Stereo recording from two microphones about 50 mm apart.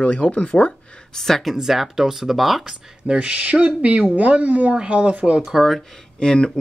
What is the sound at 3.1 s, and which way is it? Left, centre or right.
Speech, right.